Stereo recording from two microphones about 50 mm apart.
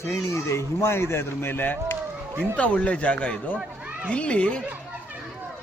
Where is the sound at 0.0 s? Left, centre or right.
Left.